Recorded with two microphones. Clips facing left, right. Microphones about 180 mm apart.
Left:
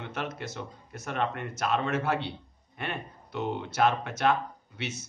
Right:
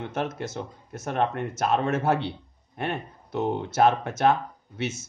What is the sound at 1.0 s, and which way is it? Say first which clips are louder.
Speech: right 5 dB; 45° right (ahead or behind).